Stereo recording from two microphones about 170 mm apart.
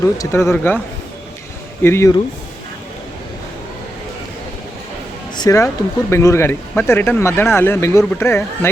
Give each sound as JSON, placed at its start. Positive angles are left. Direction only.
{"t": 0.2, "sound": "speech", "side_deg": 15}
{"t": 1.8, "sound": "speech", "side_deg": 15}
{"t": 5.4, "sound": "speech", "side_deg": 20}